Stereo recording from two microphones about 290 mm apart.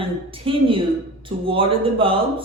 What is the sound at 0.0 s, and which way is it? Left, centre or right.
A man's voice, centre.